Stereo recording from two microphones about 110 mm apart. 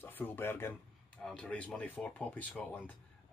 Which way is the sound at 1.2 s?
5° left (ahead or behind).